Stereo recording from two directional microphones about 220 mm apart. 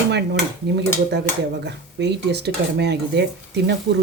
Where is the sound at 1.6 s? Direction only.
50° right (ahead or behind).